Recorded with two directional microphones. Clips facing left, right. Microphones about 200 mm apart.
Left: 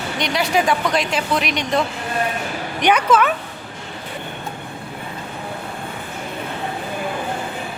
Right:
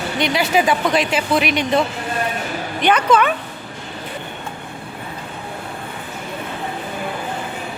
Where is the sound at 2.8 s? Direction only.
5° left (ahead or behind).